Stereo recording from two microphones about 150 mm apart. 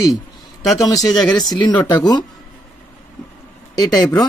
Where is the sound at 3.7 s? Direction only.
25° left (ahead or behind).